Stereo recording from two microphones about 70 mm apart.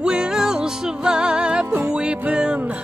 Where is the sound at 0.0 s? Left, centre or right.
Centre.